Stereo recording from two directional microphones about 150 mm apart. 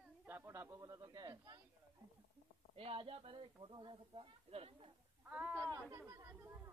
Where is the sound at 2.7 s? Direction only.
40° right (ahead or behind).